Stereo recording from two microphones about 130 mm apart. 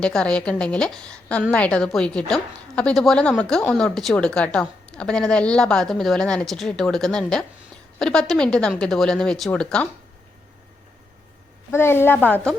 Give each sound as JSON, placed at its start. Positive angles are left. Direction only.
{"t": 0.0, "sound": "a woman's voice", "side_deg": 5}
{"t": 11.7, "sound": "a woman's voice", "side_deg": 20}